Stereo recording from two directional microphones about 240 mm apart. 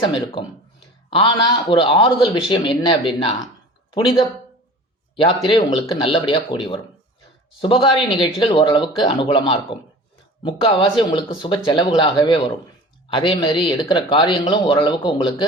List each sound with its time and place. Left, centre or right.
0.0 s speech: left
5.5 s speech: centre